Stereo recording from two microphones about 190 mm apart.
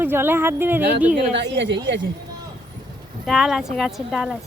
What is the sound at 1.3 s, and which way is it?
Speech, 70° right (ahead or behind).